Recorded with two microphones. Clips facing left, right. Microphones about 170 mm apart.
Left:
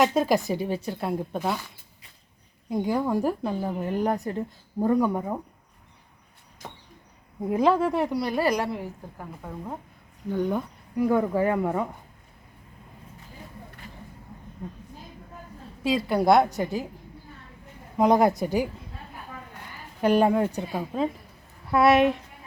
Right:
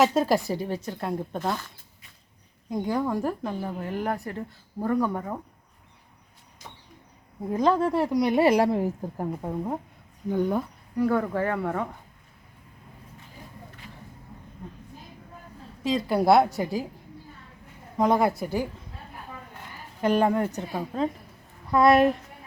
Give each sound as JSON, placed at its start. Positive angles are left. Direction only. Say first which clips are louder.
{"t": 0.0, "sound": "speech", "louder": "even", "side_deg": 0}
{"t": 6.6, "sound": "a sound", "louder": "left 5 dB", "side_deg": 60}
{"t": 7.4, "sound": "speech", "louder": "left 1 dB", "side_deg": 10}
{"t": 8.2, "sound": "a woman's voice", "louder": "right 5 dB", "side_deg": -20}
{"t": 8.7, "sound": "a woman's voice", "louder": "right 8 dB", "side_deg": -40}
{"t": 10.2, "sound": "speech", "louder": "right 1 dB", "side_deg": -15}
{"t": 10.9, "sound": "speech", "louder": "left 2 dB", "side_deg": 15}
{"t": 16.0, "sound": "speech", "louder": "even", "side_deg": -5}
{"t": 17.9, "sound": "speech", "louder": "left 2 dB", "side_deg": 15}
{"t": 20.0, "sound": "speech", "louder": "left 2 dB", "side_deg": 15}